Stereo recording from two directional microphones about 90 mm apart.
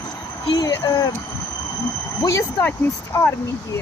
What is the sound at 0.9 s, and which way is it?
Speech, 35° left (ahead or behind).